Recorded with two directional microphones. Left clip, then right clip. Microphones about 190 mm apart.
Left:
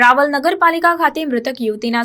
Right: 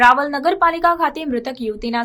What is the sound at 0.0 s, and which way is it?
Speech, 15° left (ahead or behind).